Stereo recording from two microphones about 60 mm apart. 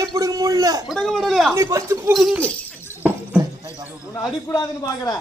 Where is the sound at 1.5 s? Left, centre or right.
Right.